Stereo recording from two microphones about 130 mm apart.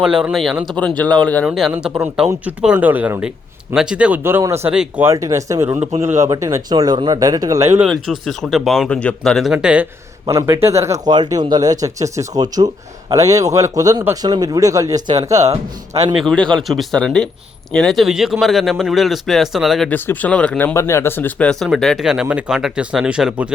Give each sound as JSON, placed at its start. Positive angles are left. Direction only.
{"t": 0.0, "sound": "speech", "side_deg": -5}
{"t": 0.8, "sound": "speech", "side_deg": 10}
{"t": 1.7, "sound": "speech", "side_deg": -15}
{"t": 4.2, "sound": "speech", "side_deg": -20}
{"t": 4.7, "sound": "speech", "side_deg": -5}
{"t": 5.0, "sound": "speech", "side_deg": -25}
{"t": 5.7, "sound": "a man's voice", "side_deg": -60}
{"t": 6.0, "sound": "speech", "side_deg": -20}
{"t": 7.9, "sound": "speech", "side_deg": 0}
{"t": 10.2, "sound": "speech", "side_deg": -25}
{"t": 16.2, "sound": "speech", "side_deg": 5}
{"t": 19.9, "sound": "speech", "side_deg": 10}
{"t": 20.7, "sound": "speech", "side_deg": 20}